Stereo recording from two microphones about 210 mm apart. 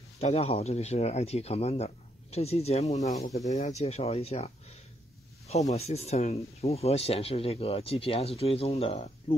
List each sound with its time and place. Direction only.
0.2 s speech: 30° left (ahead or behind)
3.3 s speech: 15° left (ahead or behind)
3.6 s speech: 30° left (ahead or behind)
5.5 s speech: 30° left (ahead or behind)